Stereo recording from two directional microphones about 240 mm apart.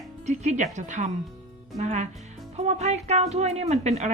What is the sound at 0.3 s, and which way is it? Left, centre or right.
A woman's voice, right.